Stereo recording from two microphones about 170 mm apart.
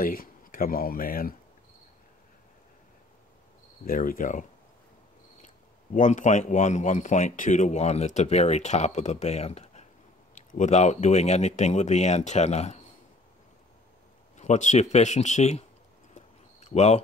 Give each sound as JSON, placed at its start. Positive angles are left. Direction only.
{"t": 0.0, "sound": "speech", "side_deg": 60}
{"t": 3.8, "sound": "speech", "side_deg": 55}
{"t": 5.9, "sound": "speech", "side_deg": 45}
{"t": 14.3, "sound": "speech", "side_deg": 45}
{"t": 16.2, "sound": "a sound", "side_deg": 40}